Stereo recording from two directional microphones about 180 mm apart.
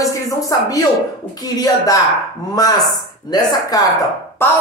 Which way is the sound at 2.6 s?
20° left (ahead or behind).